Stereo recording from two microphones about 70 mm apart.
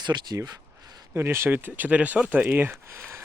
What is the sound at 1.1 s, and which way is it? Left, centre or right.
Speech, right.